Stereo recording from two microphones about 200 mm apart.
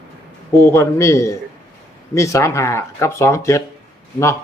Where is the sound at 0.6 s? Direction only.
15° left (ahead or behind).